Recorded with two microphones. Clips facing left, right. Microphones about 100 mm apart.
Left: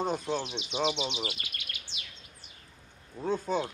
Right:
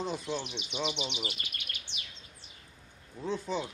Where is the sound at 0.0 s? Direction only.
45° left (ahead or behind).